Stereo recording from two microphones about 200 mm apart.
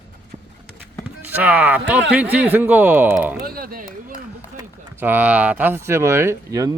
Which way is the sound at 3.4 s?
45° right (ahead or behind).